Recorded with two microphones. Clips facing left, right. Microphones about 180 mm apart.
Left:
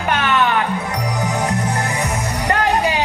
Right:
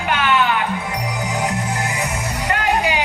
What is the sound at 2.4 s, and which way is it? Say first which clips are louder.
Music: left 2 dB; 35° left (ahead or behind).